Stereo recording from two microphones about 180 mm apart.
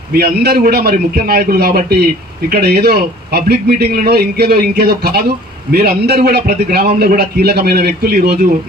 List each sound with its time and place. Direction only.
0.1 s a man's voice: 60° right (ahead or behind)